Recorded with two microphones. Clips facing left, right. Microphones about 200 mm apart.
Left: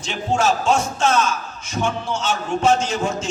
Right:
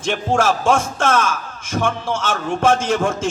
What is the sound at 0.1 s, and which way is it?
A man's voice, 50° right (ahead or behind).